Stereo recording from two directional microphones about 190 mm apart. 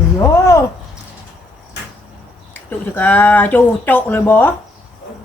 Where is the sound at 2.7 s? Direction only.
10° left (ahead or behind).